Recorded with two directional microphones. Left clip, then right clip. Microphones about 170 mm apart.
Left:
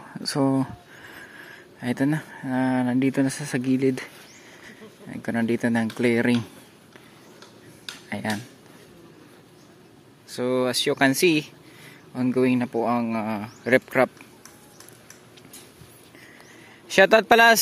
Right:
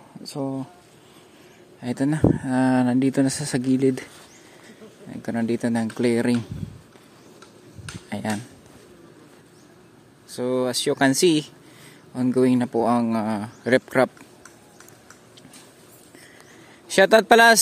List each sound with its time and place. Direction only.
1.8 s speech: 5° right (ahead or behind)
5.1 s speech: 5° right (ahead or behind)
7.8 s finger snapping: 15° right (ahead or behind)
10.3 s speech: 10° right (ahead or behind)
16.9 s speech: 15° right (ahead or behind)